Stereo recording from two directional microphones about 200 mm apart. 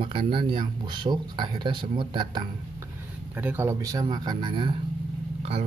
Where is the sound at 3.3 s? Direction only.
10° right (ahead or behind).